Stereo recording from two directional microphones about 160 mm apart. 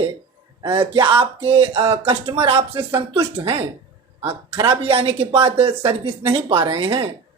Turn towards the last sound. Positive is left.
turn(degrees=-30)  # may be behind; listen again after turning